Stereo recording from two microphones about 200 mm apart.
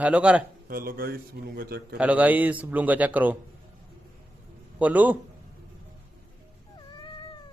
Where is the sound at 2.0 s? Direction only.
5° right (ahead or behind).